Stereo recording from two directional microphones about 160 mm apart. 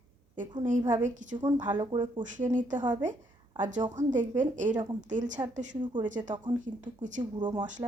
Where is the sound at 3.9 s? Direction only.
50° right (ahead or behind).